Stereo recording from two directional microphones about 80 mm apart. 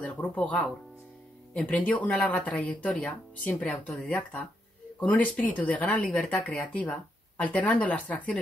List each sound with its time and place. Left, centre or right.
0.0 s speech: centre